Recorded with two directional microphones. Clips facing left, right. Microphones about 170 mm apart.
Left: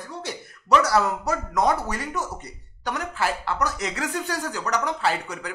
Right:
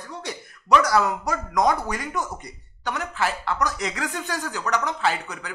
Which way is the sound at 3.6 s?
35° left (ahead or behind).